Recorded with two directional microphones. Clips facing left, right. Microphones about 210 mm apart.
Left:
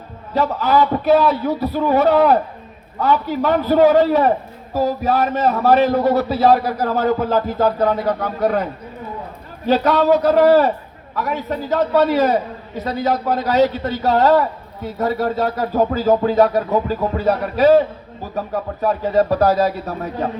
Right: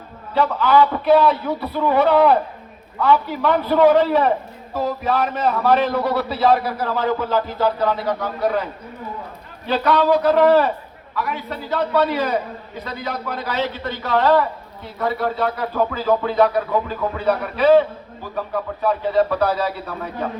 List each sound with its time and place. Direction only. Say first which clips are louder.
0.3 s a man's voice: even; 40° left (ahead or behind)
9.6 s a man's voice: left 3 dB; 40° left (ahead or behind)